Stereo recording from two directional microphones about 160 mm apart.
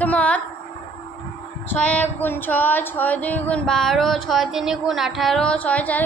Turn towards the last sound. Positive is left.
turn(degrees=10)  # may be behind; listen again after turning